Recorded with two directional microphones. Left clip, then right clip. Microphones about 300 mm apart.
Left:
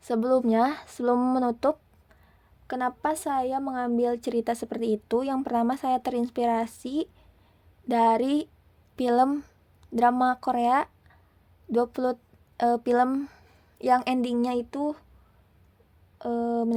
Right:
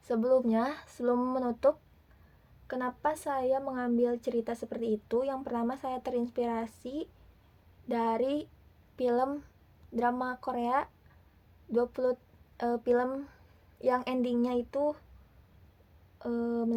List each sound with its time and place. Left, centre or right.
0.0 s a woman's voice: left
16.1 s a woman's voice: left